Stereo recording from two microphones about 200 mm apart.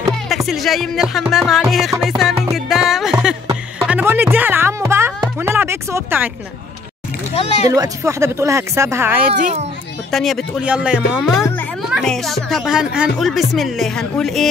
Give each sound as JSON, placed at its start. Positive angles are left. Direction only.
{"t": 0.3, "sound": "speech", "side_deg": 0}
{"t": 2.5, "sound": "music", "side_deg": 0}
{"t": 7.3, "sound": "speech", "side_deg": 30}
{"t": 7.7, "sound": "speech", "side_deg": -15}
{"t": 9.4, "sound": "a child's voice", "side_deg": -35}
{"t": 10.1, "sound": "speech", "side_deg": 0}